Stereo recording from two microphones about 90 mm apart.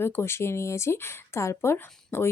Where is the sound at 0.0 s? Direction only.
30° left (ahead or behind).